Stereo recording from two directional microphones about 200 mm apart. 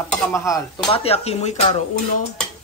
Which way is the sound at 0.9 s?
30° left (ahead or behind).